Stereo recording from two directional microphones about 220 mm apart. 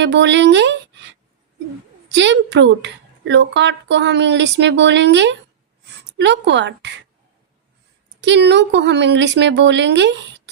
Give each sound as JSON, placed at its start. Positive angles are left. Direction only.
{"t": 0.0, "sound": "a woman's voice", "side_deg": -55}
{"t": 2.0, "sound": "a woman's voice", "side_deg": -55}
{"t": 8.2, "sound": "a woman's voice", "side_deg": -50}